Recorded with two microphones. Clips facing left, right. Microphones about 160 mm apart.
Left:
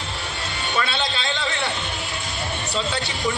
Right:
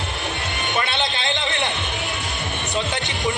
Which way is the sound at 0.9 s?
20° right (ahead or behind).